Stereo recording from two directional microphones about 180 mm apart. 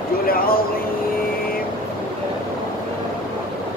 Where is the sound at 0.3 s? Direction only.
55° left (ahead or behind).